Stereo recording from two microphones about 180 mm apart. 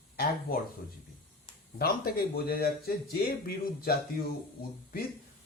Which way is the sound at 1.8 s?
55° left (ahead or behind).